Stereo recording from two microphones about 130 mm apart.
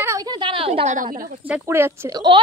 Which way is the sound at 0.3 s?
40° right (ahead or behind).